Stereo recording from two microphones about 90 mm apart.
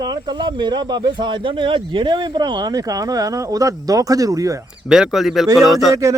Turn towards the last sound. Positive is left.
turn(degrees=-35)  # may be behind; listen again after turning